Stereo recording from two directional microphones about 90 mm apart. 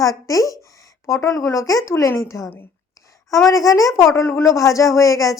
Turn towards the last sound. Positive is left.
turn(degrees=35)  # may be behind; listen again after turning